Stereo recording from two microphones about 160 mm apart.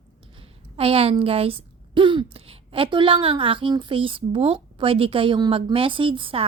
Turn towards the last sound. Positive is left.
turn(degrees=-35)  # may be behind; listen again after turning